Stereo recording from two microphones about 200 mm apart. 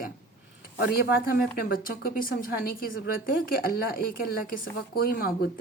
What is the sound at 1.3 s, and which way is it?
A woman's voice, 45° left (ahead or behind).